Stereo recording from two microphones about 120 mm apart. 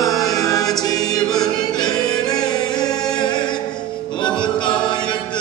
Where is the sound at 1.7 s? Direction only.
35° left (ahead or behind).